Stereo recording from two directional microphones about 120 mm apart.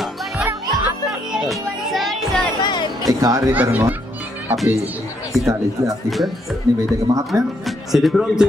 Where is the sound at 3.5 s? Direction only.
15° right (ahead or behind).